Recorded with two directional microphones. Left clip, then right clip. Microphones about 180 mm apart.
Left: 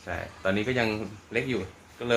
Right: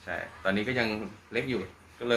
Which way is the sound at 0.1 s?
55° left (ahead or behind).